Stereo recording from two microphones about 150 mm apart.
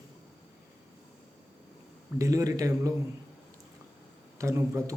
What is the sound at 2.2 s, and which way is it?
Speech, 20° right (ahead or behind).